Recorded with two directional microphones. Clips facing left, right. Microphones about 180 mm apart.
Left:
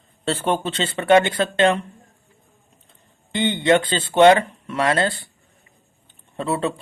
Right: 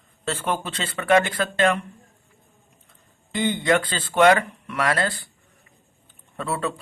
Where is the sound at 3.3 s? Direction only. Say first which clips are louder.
Left 3 dB; 25° left (ahead or behind).